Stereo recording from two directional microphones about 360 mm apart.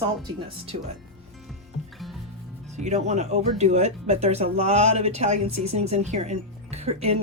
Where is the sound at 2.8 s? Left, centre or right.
Centre.